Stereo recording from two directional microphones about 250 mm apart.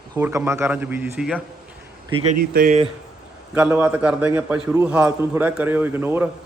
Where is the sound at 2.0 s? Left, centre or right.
Right.